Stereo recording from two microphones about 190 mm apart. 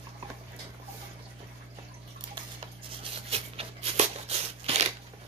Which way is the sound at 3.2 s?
30° right (ahead or behind).